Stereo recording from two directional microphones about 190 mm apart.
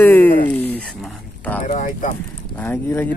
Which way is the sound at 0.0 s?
10° left (ahead or behind).